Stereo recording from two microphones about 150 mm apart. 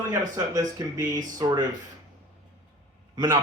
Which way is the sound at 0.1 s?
20° right (ahead or behind).